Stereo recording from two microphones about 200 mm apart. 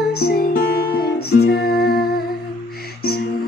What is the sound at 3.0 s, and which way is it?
Music, 50° left (ahead or behind).